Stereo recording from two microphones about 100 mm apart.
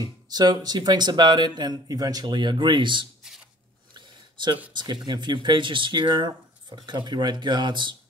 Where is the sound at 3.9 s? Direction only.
50° right (ahead or behind).